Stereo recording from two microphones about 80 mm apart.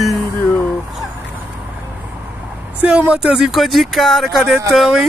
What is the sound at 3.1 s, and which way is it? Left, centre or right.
Speech, centre.